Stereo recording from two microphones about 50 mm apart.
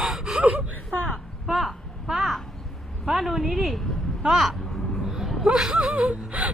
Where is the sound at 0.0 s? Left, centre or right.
Centre.